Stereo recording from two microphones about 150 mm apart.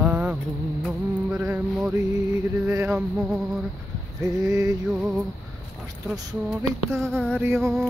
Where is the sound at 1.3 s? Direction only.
10° right (ahead or behind).